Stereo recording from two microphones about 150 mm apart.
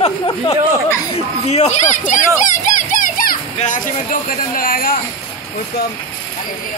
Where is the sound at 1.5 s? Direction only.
50° left (ahead or behind).